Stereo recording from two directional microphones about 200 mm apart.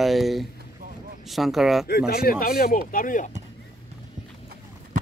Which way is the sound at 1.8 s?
50° left (ahead or behind).